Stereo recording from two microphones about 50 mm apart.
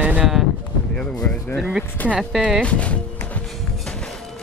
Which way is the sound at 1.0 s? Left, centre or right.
Left.